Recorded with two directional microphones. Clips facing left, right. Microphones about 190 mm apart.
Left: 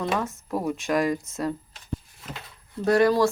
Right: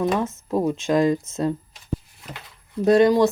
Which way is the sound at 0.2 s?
20° right (ahead or behind).